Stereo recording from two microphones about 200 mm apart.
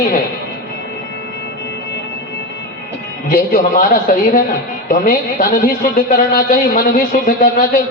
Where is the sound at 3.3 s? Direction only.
40° left (ahead or behind).